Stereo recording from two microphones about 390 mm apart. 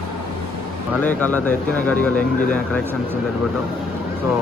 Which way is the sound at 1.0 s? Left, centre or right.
Centre.